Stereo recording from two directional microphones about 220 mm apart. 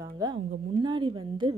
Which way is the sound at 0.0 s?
15° right (ahead or behind).